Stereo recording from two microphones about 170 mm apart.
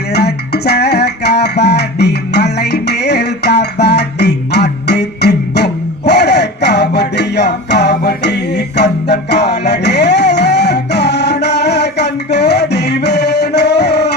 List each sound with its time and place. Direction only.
0.1 s music: 70° left (ahead or behind)